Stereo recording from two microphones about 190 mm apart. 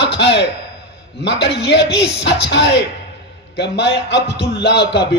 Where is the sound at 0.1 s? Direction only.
65° left (ahead or behind).